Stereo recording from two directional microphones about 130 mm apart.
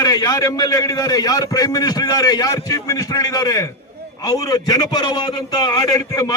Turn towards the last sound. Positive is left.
turn(degrees=30)  # may be behind; listen again after turning